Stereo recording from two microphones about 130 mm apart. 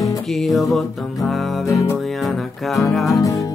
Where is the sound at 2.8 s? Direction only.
Centre (ahead or behind).